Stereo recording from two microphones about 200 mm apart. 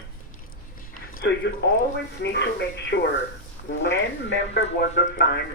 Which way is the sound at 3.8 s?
60° left (ahead or behind).